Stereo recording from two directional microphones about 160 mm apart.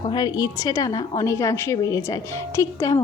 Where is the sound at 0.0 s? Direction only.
25° left (ahead or behind).